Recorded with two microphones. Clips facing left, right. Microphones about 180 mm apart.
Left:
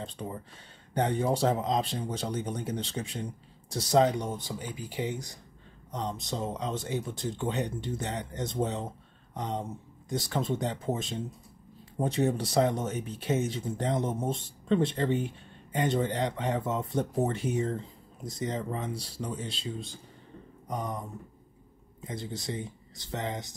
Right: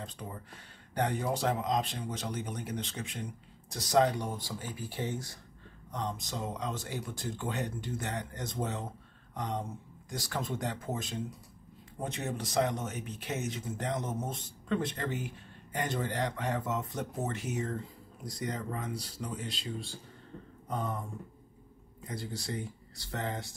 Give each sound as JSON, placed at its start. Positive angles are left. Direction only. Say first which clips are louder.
{"t": 0.0, "sound": "speech", "louder": "left 5 dB", "side_deg": 25}
{"t": 20.6, "sound": "a sound", "louder": "left 1 dB", "side_deg": 15}
{"t": 22.0, "sound": "speech", "louder": "left 3 dB", "side_deg": 20}